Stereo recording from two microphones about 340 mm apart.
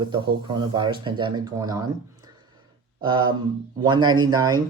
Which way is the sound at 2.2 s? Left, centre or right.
Centre.